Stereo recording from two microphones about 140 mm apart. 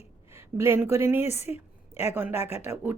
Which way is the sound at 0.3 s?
15° right (ahead or behind).